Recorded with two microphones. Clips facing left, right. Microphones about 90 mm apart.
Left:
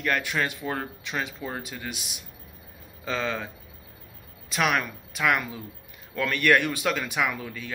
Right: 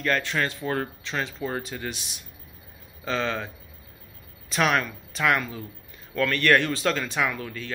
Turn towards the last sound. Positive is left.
turn(degrees=10)  # may be behind; listen again after turning